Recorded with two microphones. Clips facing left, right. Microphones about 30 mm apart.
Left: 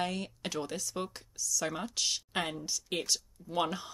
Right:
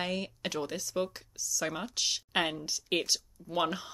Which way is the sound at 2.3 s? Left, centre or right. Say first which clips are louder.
Right 3 dB; centre.